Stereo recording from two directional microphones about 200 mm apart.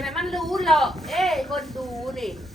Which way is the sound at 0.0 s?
Centre (ahead or behind).